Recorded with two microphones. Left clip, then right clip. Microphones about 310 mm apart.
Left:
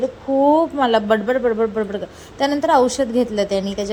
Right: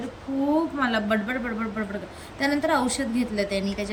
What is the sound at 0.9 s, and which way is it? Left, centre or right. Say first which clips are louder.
A woman's voice: left 9 dB; centre.